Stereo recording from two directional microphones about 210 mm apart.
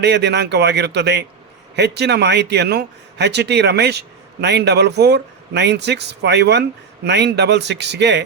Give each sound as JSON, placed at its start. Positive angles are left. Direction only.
{"t": 0.0, "sound": "speech", "side_deg": -55}